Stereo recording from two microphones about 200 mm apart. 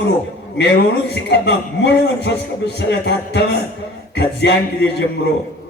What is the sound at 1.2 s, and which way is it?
A man's voice, 60° left (ahead or behind).